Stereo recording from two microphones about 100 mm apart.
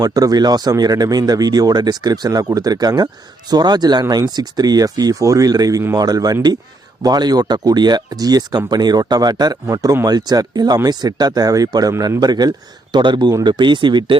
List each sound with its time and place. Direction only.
0.0 s a man's voice: 40° right (ahead or behind)